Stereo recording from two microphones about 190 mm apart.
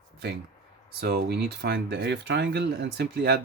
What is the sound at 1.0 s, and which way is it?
Speech, 60° right (ahead or behind).